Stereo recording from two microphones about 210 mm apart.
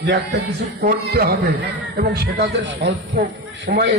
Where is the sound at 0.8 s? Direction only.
45° right (ahead or behind).